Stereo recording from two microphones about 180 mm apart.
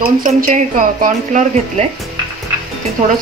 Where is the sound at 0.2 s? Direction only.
50° right (ahead or behind).